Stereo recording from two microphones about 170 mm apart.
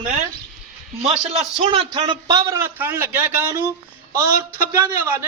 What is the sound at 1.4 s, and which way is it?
A man's voice, 35° right (ahead or behind).